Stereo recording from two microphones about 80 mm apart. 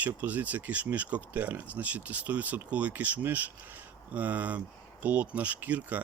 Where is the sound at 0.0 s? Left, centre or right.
Centre.